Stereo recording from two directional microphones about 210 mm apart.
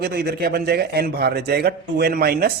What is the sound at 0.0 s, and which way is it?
Speech, 50° right (ahead or behind).